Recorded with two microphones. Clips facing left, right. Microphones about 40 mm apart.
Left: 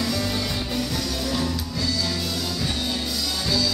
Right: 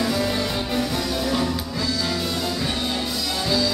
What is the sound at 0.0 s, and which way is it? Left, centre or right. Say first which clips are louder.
Music: right 3 dB; centre.